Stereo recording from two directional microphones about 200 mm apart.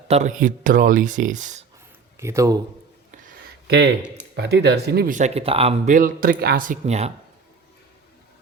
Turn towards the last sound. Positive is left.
turn(degrees=-35)  # may be behind; listen again after turning